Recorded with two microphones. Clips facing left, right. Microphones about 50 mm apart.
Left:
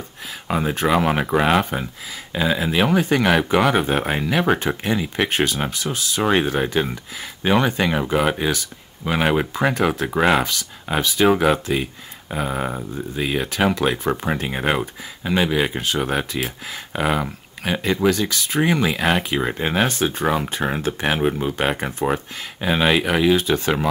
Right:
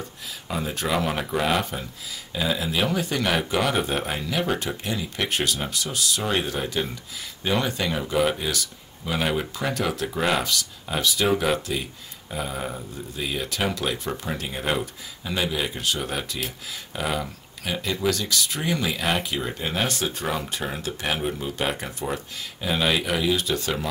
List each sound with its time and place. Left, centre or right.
0.5 s speech: left
19.9 s speech: left